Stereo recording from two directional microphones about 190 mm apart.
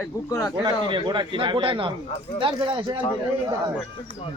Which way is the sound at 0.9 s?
25° right (ahead or behind).